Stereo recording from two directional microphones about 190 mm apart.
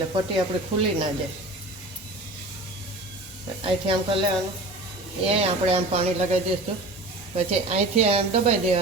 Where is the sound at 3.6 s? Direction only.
25° right (ahead or behind).